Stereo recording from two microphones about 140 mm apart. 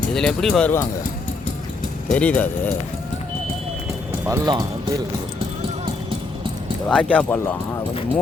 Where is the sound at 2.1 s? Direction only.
10° left (ahead or behind).